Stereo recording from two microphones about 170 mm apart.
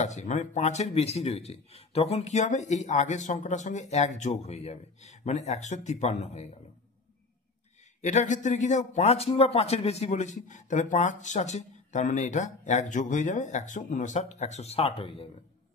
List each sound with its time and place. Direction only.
0.0 s speech: 45° left (ahead or behind)
8.0 s speech: 45° left (ahead or behind)